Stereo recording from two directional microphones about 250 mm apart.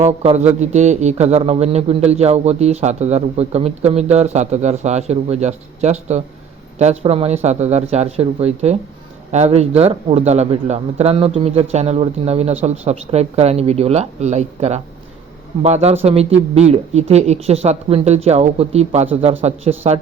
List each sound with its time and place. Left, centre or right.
0.0 s speech: right